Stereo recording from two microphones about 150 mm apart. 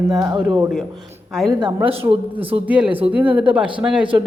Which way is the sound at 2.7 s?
5° right (ahead or behind).